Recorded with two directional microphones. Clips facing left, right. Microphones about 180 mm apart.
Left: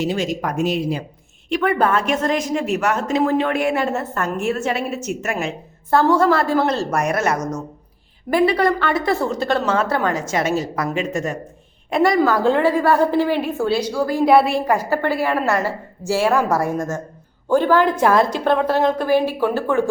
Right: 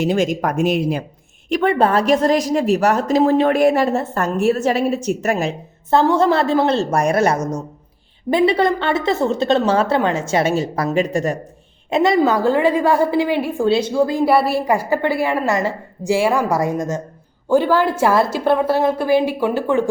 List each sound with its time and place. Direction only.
0.0 s speech: 50° right (ahead or behind)
1.6 s a woman's voice: 30° right (ahead or behind)
5.9 s a woman's voice: 25° right (ahead or behind)
11.9 s a woman's voice: 25° right (ahead or behind)
12.4 s a woman's voice: 10° right (ahead or behind)
13.7 s a woman's voice: 25° right (ahead or behind)
14.3 s a woman's voice: 5° right (ahead or behind)